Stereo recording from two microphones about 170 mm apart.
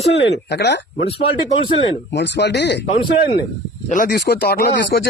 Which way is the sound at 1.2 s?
30° left (ahead or behind).